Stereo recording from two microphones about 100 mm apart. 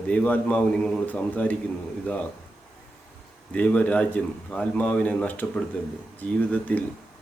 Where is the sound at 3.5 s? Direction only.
10° left (ahead or behind).